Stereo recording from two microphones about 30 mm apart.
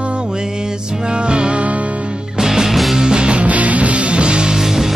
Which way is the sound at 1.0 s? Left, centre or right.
Right.